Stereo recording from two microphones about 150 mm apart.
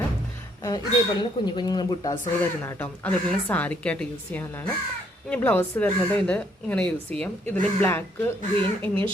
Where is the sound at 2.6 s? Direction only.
15° left (ahead or behind).